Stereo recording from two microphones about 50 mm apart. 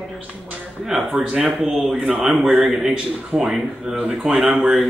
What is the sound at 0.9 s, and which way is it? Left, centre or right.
Speech, centre.